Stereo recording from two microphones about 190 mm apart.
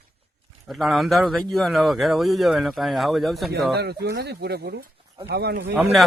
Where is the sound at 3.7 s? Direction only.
60° right (ahead or behind).